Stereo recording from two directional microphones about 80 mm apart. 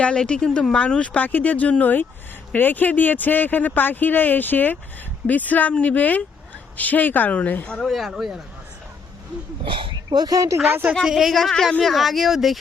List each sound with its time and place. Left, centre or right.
0.0 s speech: centre
7.8 s speech: centre
9.6 s speech: right
10.7 s speech: right
11.0 s speech: centre